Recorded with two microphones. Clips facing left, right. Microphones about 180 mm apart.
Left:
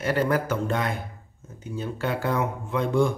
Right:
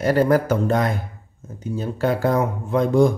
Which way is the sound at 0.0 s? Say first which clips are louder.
Right 7 dB; 40° right (ahead or behind).